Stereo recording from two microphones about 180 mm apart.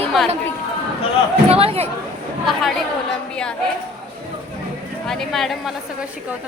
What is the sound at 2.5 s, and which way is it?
Speech, centre (ahead or behind).